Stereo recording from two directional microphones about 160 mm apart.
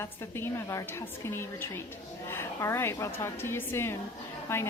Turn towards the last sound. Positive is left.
turn(degrees=15)  # may be behind; listen again after turning